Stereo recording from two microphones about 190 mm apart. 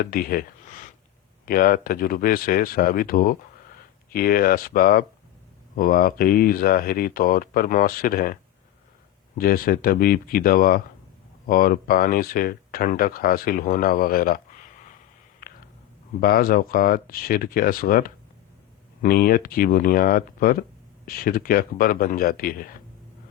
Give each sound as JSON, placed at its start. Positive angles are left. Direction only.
{"t": 0.0, "sound": "speech", "side_deg": 50}
{"t": 9.4, "sound": "speech", "side_deg": 50}
{"t": 16.2, "sound": "speech", "side_deg": 50}